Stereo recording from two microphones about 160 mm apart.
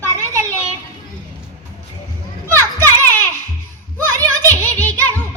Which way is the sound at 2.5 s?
15° left (ahead or behind).